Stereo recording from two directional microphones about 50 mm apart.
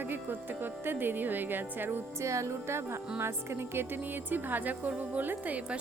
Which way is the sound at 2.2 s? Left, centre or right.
Right.